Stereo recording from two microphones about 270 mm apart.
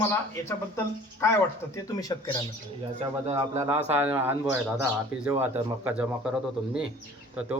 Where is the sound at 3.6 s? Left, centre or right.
Centre.